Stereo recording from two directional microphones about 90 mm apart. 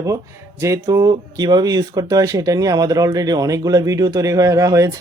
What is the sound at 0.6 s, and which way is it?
Speech, 40° right (ahead or behind).